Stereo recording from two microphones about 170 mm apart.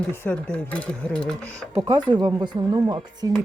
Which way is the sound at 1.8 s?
25° right (ahead or behind).